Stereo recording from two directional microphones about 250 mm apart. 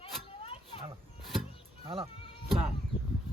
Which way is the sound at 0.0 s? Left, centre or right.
Left.